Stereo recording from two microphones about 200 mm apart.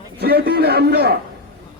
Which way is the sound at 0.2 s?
50° right (ahead or behind).